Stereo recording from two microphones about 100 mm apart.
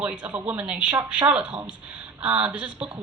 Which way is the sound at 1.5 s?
50° right (ahead or behind).